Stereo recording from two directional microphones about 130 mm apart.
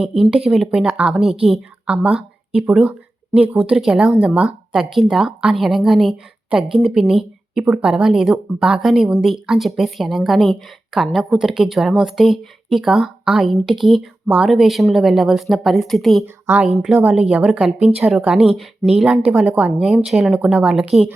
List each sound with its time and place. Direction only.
0.0 s speech: 5° right (ahead or behind)
14.3 s a woman's voice: 10° right (ahead or behind)
14.5 s speech: centre (ahead or behind)
16.2 s a woman's voice: 15° right (ahead or behind)
16.6 s a woman's voice: 5° right (ahead or behind)